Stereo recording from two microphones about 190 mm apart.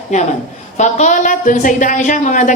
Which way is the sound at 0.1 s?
40° left (ahead or behind).